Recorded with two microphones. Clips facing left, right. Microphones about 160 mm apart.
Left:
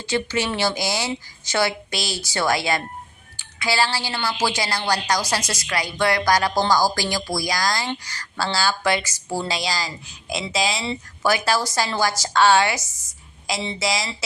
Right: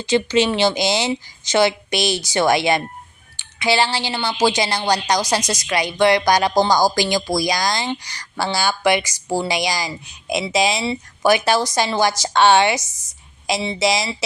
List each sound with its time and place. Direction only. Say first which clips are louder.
0.0 s speech: right 7 dB; 20° right (ahead or behind)